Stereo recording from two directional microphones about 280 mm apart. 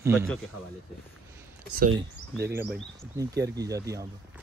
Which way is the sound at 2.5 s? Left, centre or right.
Centre.